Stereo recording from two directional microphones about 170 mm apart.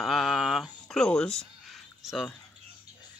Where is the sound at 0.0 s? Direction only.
Centre (ahead or behind).